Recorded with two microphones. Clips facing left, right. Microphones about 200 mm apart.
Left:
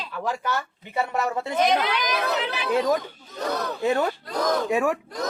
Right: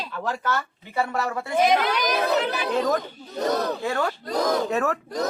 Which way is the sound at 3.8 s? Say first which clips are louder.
Left 3 dB; 20° left (ahead or behind).